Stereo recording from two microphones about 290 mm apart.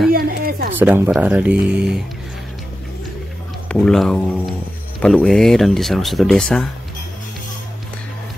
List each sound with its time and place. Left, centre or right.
0.1 s a sound: right
0.7 s speech: centre
3.6 s speech: centre